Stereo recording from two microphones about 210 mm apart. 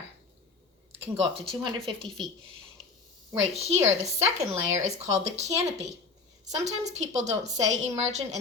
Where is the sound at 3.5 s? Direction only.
30° right (ahead or behind).